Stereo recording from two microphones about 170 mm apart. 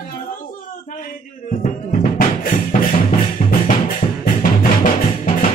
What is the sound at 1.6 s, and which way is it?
Music, 50° left (ahead or behind).